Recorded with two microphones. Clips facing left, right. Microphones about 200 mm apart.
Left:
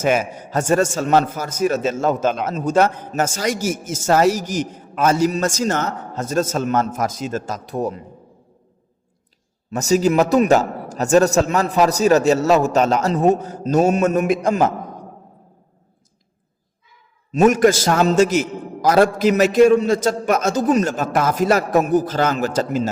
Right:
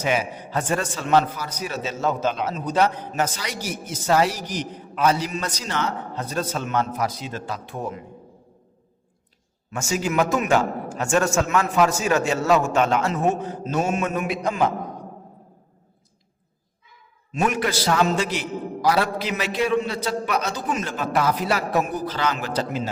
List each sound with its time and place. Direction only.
0.0 s a man's voice: 45° left (ahead or behind)
9.6 s a man's voice: 40° left (ahead or behind)
17.3 s a man's voice: 45° left (ahead or behind)